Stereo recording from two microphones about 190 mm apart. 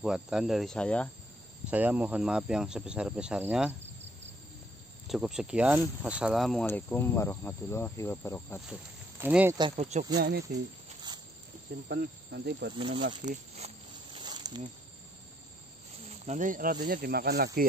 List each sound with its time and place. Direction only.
0.0 s speech: 5° right (ahead or behind)
1.7 s speech: 10° right (ahead or behind)
5.0 s speech: centre (ahead or behind)
6.6 s speech: 10° left (ahead or behind)
9.2 s speech: 10° right (ahead or behind)
9.6 s speech: 30° right (ahead or behind)
10.1 s speech: 55° right (ahead or behind)
11.9 s speech: 60° right (ahead or behind)
12.7 s speech: 25° right (ahead or behind)
13.2 s speech: 40° right (ahead or behind)
14.1 s insect: 25° right (ahead or behind)
16.1 s speech: 40° right (ahead or behind)